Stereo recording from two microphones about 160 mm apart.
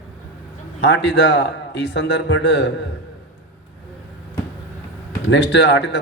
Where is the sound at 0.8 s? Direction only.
90° left.